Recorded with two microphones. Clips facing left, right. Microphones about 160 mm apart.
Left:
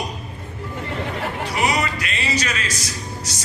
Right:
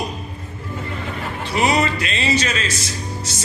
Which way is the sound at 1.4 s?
25° right (ahead or behind).